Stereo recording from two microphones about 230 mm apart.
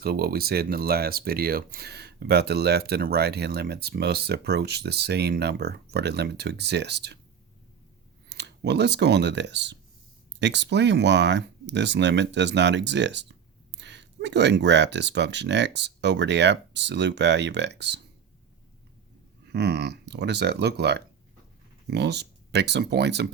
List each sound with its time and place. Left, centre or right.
0.0 s speech: right
8.3 s speech: right
19.5 s speech: right